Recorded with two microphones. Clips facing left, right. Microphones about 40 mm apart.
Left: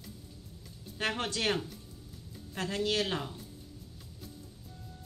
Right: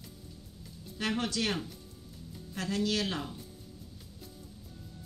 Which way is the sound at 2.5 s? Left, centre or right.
Left.